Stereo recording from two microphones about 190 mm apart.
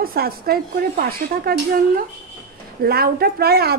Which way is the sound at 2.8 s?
55° right (ahead or behind).